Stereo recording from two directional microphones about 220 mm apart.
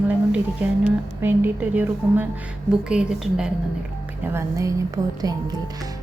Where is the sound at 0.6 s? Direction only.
5° right (ahead or behind).